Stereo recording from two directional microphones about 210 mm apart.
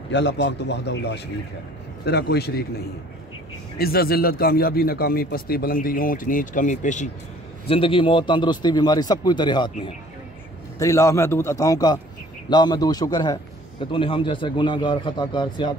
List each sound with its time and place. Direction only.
0.1 s a man's voice: 55° left (ahead or behind)
3.7 s a man's voice: 45° left (ahead or behind); by 15.7 s 20° left (ahead or behind)